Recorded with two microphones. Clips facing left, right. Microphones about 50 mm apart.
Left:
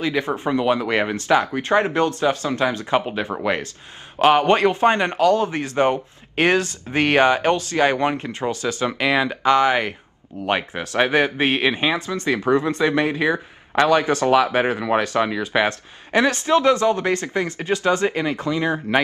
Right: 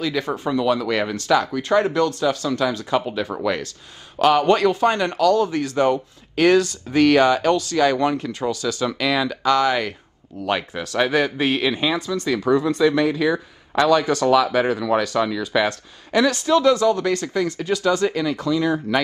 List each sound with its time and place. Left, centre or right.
0.0 s speech: left